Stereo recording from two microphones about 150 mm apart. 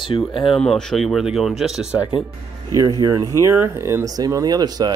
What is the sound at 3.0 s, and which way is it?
Speech, 20° right (ahead or behind).